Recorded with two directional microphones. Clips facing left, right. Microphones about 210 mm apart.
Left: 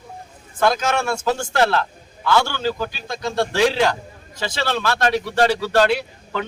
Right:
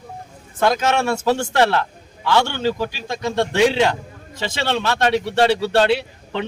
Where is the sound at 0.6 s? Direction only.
20° right (ahead or behind).